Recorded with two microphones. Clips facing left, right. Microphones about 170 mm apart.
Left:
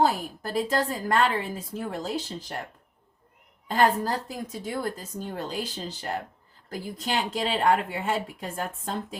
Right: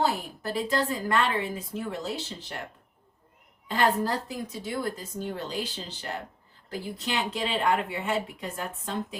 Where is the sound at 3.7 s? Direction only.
40° left (ahead or behind).